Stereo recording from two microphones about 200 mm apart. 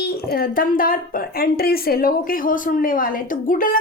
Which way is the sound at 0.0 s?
50° left (ahead or behind).